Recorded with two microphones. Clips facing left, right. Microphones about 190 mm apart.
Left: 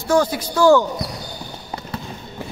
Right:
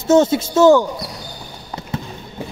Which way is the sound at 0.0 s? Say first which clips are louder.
Right 5 dB; 25° right (ahead or behind).